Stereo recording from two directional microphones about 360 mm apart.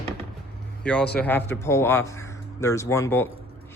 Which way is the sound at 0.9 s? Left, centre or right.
Centre.